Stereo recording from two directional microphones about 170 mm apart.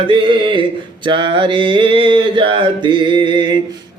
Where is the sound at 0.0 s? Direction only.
30° right (ahead or behind).